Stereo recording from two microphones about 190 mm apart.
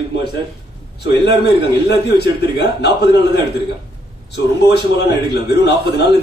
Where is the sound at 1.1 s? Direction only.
60° left (ahead or behind).